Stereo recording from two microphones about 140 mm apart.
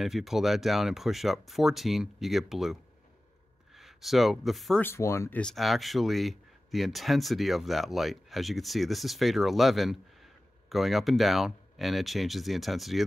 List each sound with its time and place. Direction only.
0.0 s speech: centre (ahead or behind)
4.8 s speech: 20° left (ahead or behind)
5.4 s speech: centre (ahead or behind)